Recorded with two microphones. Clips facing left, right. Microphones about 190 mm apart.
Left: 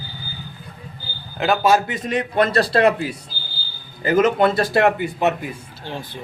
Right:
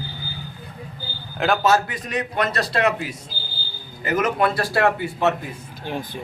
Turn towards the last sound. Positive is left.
turn(degrees=-15)  # may be behind; listen again after turning